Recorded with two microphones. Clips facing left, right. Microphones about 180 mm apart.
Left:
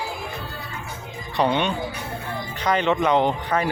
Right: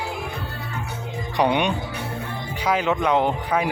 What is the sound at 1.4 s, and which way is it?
Speech, 15° right (ahead or behind).